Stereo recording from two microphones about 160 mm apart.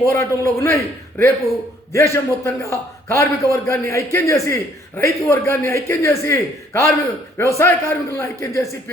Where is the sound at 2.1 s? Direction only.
20° left (ahead or behind).